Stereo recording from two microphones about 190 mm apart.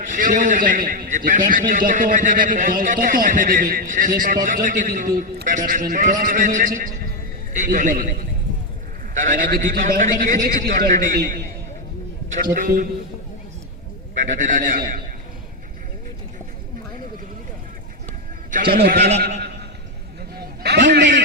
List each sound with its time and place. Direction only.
0.0 s a man's voice: 40° right (ahead or behind)
9.1 s a man's voice: 45° right (ahead or behind)
12.5 s a man's voice: 45° right (ahead or behind)
14.3 s a man's voice: 40° right (ahead or behind)
18.5 s a man's voice: 50° right (ahead or behind)
18.9 s a man's voice: 35° right (ahead or behind)
20.3 s a sound: 55° right (ahead or behind)